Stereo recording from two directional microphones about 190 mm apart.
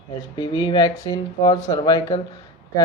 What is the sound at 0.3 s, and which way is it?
Speech, 25° left (ahead or behind).